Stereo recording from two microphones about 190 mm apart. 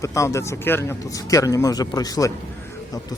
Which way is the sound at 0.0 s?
15° left (ahead or behind).